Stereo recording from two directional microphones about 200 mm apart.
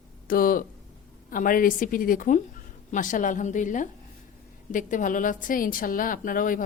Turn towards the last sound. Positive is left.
turn(degrees=45)  # may be behind; listen again after turning